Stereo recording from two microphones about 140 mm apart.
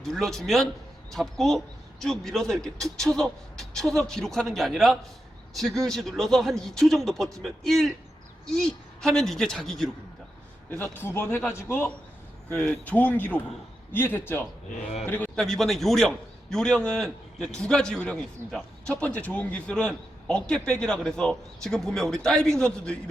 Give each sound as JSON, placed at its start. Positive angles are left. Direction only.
{"t": 0.0, "sound": "a man's voice", "side_deg": 0}
{"t": 10.7, "sound": "a man's voice", "side_deg": 15}